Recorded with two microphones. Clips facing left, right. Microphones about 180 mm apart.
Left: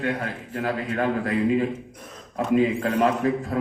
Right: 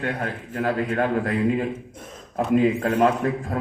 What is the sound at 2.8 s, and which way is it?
Speech, 45° right (ahead or behind).